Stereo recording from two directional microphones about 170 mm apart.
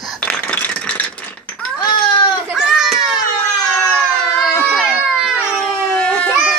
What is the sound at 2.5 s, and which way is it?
Baby cry, centre (ahead or behind).